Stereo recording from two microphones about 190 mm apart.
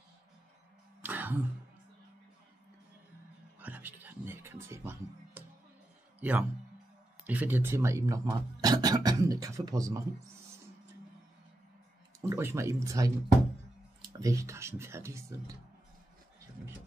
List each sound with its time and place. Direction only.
1.0 s throat clearing: 10° right (ahead or behind)
3.5 s music: 10° right (ahead or behind)
6.1 s a sound: 10° right (ahead or behind)
7.2 s speech: 10° right (ahead or behind)
12.2 s speech: 15° right (ahead or behind)
14.2 s speech: 15° right (ahead or behind)